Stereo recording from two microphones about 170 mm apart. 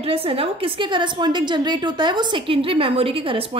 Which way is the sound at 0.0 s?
35° right (ahead or behind).